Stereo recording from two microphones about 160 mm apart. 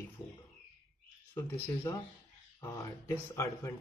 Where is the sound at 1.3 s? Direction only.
15° left (ahead or behind).